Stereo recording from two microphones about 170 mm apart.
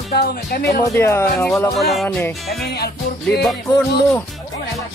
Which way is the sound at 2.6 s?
70° left (ahead or behind).